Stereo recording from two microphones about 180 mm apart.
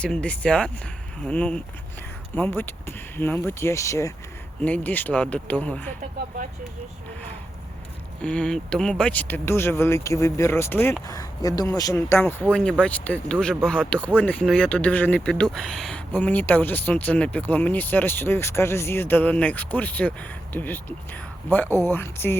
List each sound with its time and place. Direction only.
0.0 s speech: 5° left (ahead or behind)
8.2 s speech: 5° left (ahead or behind)